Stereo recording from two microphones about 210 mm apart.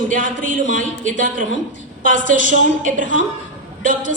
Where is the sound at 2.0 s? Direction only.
40° right (ahead or behind).